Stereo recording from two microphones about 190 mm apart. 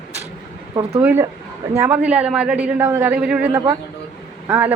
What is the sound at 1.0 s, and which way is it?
A man's voice, 10° right (ahead or behind).